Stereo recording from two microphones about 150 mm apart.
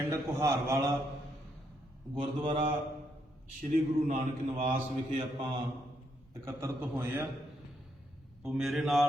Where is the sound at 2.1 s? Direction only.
30° right (ahead or behind).